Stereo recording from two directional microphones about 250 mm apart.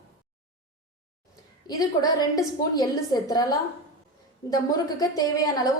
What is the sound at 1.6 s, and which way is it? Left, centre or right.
A woman's voice, centre.